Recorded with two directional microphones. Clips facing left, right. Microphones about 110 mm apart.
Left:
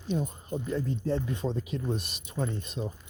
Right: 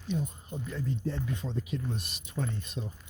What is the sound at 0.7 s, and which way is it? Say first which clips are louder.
Speech: left 4 dB; 30° left (ahead or behind).